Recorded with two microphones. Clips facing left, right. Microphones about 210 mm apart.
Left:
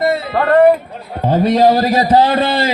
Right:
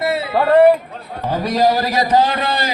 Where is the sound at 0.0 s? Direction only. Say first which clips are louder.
Left 2 dB; 5° right (ahead or behind).